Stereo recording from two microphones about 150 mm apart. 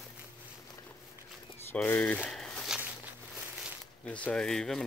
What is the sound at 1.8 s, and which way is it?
Speech, 10° left (ahead or behind).